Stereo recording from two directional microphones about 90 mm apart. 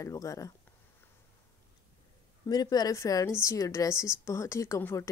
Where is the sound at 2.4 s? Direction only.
45° left (ahead or behind); by 5.0 s 30° left (ahead or behind).